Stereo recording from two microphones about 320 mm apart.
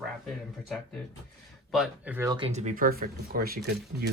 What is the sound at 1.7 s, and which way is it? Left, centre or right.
Speech, centre.